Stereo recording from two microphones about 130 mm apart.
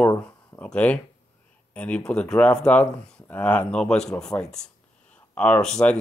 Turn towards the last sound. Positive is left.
turn(degrees=5)  # may be behind; listen again after turning